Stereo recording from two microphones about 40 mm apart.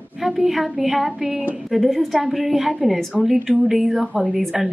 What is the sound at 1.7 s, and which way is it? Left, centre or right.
A woman's voice, centre.